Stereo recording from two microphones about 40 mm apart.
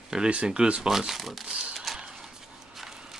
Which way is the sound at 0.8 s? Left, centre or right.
Centre.